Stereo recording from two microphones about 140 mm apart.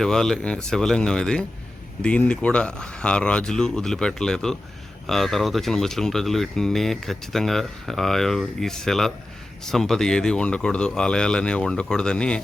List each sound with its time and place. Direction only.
0.0 s speech: 5° left (ahead or behind)